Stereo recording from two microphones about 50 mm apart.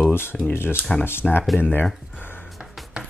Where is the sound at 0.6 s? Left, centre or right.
Left.